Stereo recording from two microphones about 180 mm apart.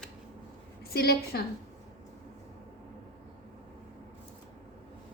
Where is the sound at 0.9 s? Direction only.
60° left (ahead or behind).